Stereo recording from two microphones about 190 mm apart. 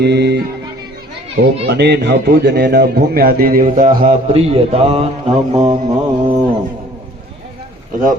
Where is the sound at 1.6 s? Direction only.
60° right (ahead or behind); by 4.1 s 45° right (ahead or behind).